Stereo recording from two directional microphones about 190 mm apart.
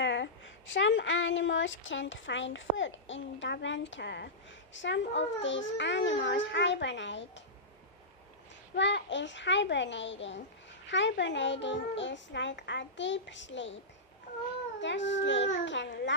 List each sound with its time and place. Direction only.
0.0 s a woman's voice: 70° left (ahead or behind)
8.7 s a woman's voice: 65° left (ahead or behind)
14.8 s a woman's voice: 70° left (ahead or behind)